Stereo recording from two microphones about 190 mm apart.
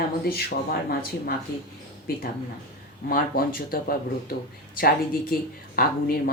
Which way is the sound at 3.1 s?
50° left (ahead or behind).